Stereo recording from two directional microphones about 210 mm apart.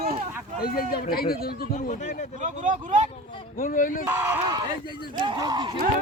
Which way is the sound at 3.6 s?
40° left (ahead or behind).